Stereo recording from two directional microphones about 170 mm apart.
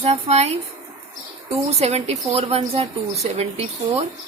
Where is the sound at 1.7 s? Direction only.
40° right (ahead or behind).